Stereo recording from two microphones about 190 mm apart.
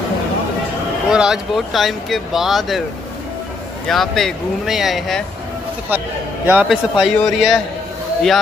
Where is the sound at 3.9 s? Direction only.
Centre (ahead or behind).